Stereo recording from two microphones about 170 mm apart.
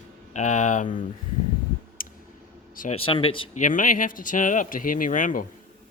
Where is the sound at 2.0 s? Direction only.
55° left (ahead or behind).